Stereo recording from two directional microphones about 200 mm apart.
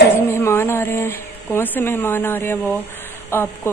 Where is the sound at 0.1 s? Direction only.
10° left (ahead or behind).